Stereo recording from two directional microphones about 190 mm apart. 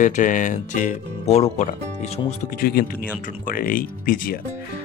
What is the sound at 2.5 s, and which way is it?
Speech, 50° left (ahead or behind).